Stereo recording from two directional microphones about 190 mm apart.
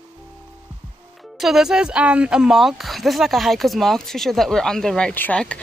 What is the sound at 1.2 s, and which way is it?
Speech, centre (ahead or behind).